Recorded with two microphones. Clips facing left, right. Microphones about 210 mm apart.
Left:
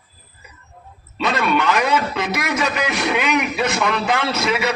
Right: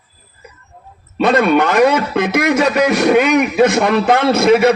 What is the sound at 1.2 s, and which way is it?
A man's voice, 50° right (ahead or behind).